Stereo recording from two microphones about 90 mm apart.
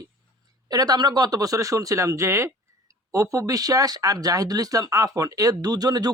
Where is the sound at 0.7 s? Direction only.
50° right (ahead or behind).